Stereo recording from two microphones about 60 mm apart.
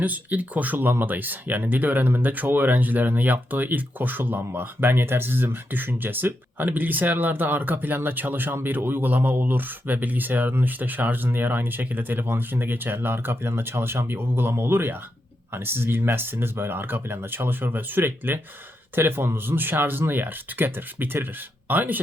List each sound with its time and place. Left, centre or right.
0.0 s speech: right